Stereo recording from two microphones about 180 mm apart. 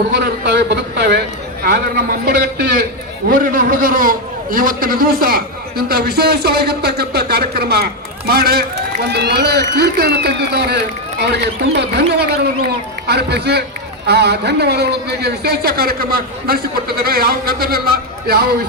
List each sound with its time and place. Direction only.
0.1 s a man's voice: 70° right (ahead or behind)
11.8 s a man's voice: 65° right (ahead or behind)